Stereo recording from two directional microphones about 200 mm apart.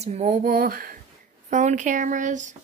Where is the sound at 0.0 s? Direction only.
35° right (ahead or behind).